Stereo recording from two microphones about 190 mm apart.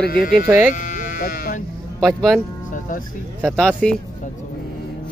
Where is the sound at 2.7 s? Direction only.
45° left (ahead or behind).